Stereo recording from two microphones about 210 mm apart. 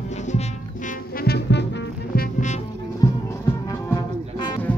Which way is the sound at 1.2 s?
50° left (ahead or behind).